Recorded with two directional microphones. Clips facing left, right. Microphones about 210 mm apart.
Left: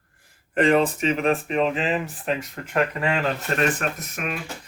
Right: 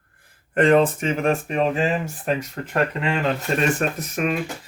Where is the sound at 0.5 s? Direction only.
50° right (ahead or behind).